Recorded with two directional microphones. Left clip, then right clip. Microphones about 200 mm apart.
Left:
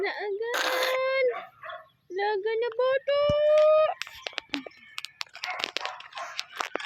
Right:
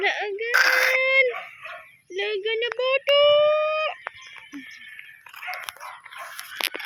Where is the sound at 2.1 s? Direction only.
25° left (ahead or behind).